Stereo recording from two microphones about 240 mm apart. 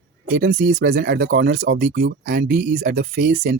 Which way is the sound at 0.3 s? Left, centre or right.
Right.